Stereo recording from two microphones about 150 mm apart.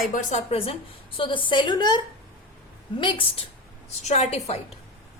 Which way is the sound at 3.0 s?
35° left (ahead or behind).